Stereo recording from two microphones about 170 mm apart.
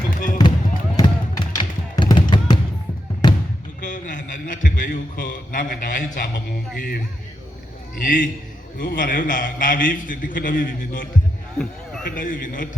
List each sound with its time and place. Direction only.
0.1 s music: 50° left (ahead or behind)
0.9 s basketball bounce: 25° left (ahead or behind)
3.8 s a sound: 50° left (ahead or behind)
7.9 s a man's voice: 55° left (ahead or behind)
11.5 s a sound: 5° left (ahead or behind)
12.0 s a man's voice: 55° left (ahead or behind)